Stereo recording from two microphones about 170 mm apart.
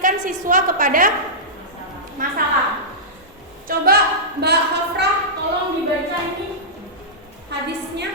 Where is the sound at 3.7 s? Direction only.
60° right (ahead or behind).